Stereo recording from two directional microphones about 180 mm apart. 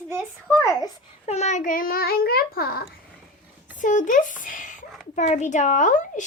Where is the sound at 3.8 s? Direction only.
45° left (ahead or behind).